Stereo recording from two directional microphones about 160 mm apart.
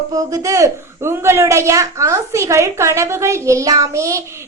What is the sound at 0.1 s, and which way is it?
A woman's voice, 20° right (ahead or behind).